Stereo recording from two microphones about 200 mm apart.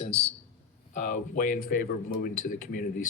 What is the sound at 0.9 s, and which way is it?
A man's voice, 40° left (ahead or behind).